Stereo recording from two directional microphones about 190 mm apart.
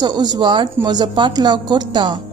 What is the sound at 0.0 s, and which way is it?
A woman's voice, 20° right (ahead or behind).